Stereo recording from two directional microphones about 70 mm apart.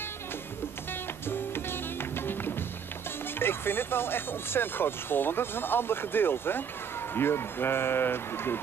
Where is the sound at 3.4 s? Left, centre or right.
Left.